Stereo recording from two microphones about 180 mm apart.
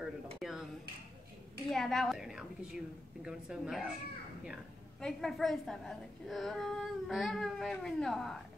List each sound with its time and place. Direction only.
0.0 s dishes: centre (ahead or behind)
1.7 s a woman's voice: centre (ahead or behind)
5.0 s a woman's voice: centre (ahead or behind)